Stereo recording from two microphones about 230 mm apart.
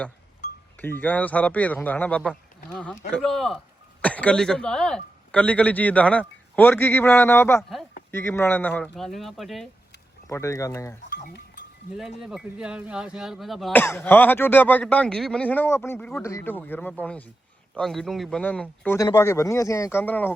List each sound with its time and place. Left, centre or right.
0.8 s speech: centre
10.2 s speech: centre
11.1 s livestock: left
12.2 s speech: centre